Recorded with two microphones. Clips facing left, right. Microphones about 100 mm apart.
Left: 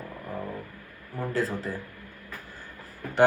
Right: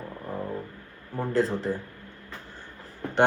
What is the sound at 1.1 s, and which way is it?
Speech, 25° right (ahead or behind).